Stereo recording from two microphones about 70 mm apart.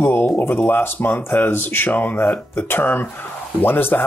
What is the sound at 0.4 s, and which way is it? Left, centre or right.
Speech, left.